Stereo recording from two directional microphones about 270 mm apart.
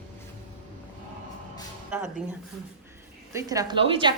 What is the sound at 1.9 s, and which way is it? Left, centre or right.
Speech, centre.